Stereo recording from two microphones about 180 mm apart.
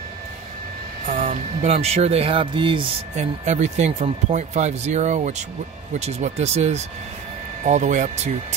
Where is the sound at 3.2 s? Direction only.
40° right (ahead or behind).